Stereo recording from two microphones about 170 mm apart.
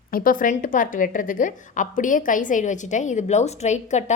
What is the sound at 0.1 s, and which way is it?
A woman's voice, 55° left (ahead or behind).